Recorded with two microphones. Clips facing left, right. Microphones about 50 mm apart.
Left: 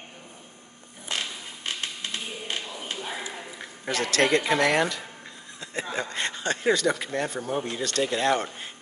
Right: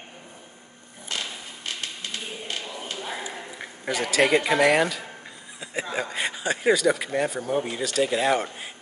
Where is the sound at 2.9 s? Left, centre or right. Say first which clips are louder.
Right 2 dB; centre.